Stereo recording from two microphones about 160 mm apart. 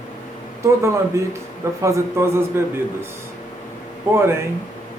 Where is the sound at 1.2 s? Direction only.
20° right (ahead or behind).